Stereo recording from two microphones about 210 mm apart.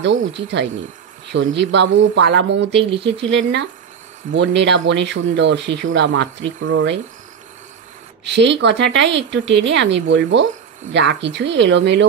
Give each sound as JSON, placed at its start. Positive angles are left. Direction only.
{"t": 0.0, "sound": "a woman's voice", "side_deg": -55}
{"t": 8.3, "sound": "a woman's voice", "side_deg": -55}